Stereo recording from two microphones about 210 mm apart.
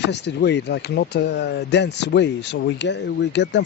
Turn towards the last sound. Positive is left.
turn(degrees=55)  # may be behind; listen again after turning